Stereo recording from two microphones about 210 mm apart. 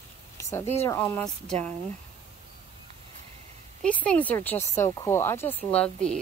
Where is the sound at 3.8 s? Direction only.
5° left (ahead or behind).